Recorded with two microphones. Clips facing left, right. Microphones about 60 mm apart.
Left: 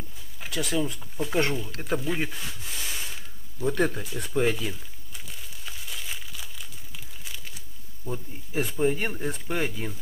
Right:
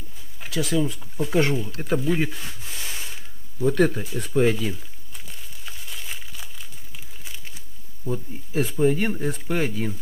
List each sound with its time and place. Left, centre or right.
0.4 s speech: centre
1.9 s rub: centre
4.0 s crumpling: centre
8.6 s speech: centre